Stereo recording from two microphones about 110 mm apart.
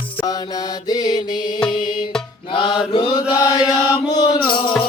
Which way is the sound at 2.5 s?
45° left (ahead or behind).